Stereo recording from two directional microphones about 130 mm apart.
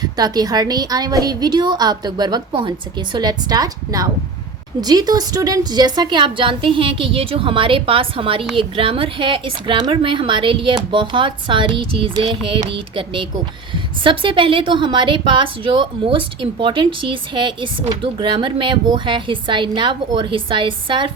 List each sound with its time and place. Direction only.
0.0 s a woman's voice: 30° right (ahead or behind)